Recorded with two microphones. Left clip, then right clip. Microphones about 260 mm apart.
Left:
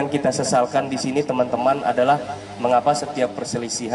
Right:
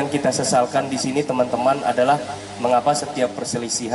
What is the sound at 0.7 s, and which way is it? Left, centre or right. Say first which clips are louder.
A man's voice: even; centre.